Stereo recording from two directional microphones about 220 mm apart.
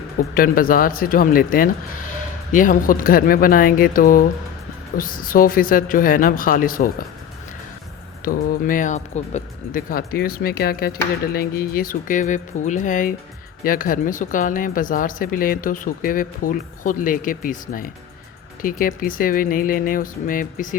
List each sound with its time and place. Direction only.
0.3 s speech: 40° left (ahead or behind)
8.2 s speech: 40° left (ahead or behind)